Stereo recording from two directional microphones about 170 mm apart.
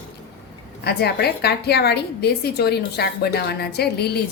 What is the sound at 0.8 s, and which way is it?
A woman's voice, 70° left (ahead or behind).